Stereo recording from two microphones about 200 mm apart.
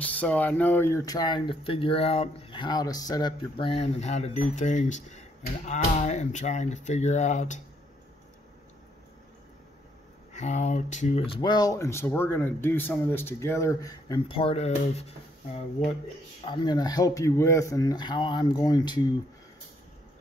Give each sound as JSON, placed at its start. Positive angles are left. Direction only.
{"t": 0.0, "sound": "speech", "side_deg": 5}
{"t": 10.3, "sound": "speech", "side_deg": 35}